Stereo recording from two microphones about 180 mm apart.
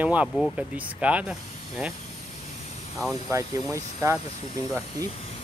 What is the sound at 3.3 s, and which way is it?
Speech, 15° right (ahead or behind).